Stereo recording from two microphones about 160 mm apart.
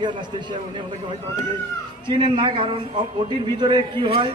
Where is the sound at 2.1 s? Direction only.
30° right (ahead or behind).